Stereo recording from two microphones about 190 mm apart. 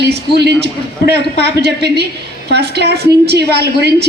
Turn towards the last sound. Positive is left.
turn(degrees=-60)  # may be behind; listen again after turning